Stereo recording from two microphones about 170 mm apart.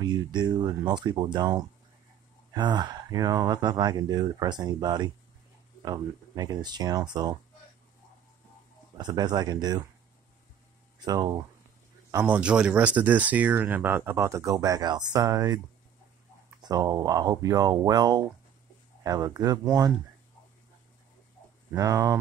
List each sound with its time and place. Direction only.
0.0 s speech: 25° right (ahead or behind)
8.9 s speech: 25° right (ahead or behind)
11.1 s speech: 20° right (ahead or behind)
16.6 s speech: 20° right (ahead or behind)
21.7 s speech: 20° right (ahead or behind)